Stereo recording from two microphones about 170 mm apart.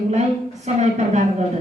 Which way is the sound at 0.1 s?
40° right (ahead or behind).